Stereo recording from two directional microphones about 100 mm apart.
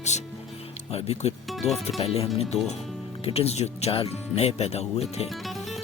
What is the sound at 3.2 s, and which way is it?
Speech, 90° left.